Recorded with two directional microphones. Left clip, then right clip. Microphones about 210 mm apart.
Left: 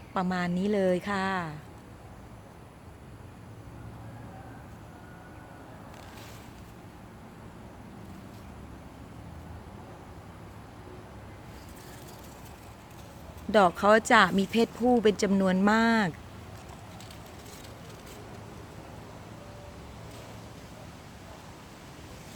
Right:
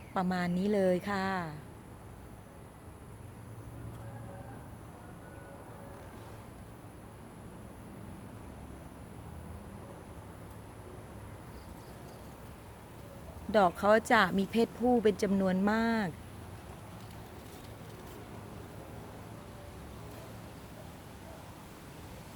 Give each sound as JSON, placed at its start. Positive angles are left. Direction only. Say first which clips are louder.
{"t": 0.1, "sound": "a woman's voice", "louder": "left 3 dB", "side_deg": 5}
{"t": 13.5, "sound": "speech", "louder": "left 4 dB", "side_deg": 25}